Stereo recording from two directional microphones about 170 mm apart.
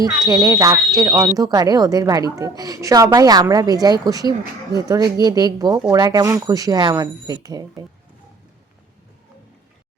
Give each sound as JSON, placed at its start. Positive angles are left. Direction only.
{"t": 0.0, "sound": "a woman's voice", "side_deg": -20}